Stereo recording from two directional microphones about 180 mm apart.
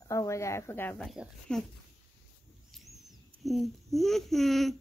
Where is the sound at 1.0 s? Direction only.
Centre (ahead or behind).